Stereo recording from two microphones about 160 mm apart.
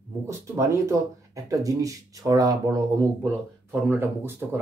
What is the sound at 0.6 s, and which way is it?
Speech, 20° right (ahead or behind).